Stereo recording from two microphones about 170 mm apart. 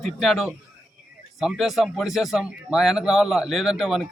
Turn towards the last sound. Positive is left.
turn(degrees=0)  # may be behind; listen again after turning